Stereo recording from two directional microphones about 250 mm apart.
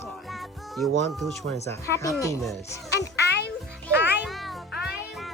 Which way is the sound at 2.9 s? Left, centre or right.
Left.